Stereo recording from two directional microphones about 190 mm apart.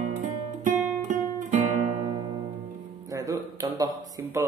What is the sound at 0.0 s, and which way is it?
Music, 40° right (ahead or behind).